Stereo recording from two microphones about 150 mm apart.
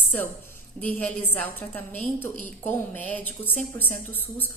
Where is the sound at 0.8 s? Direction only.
10° left (ahead or behind).